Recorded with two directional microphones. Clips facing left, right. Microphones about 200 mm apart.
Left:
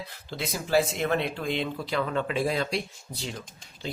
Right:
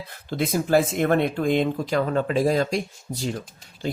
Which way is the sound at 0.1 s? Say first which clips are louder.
Right 13 dB; 50° right (ahead or behind).